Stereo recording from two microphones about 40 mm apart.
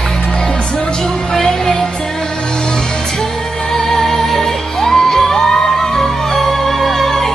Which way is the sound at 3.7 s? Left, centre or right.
Centre.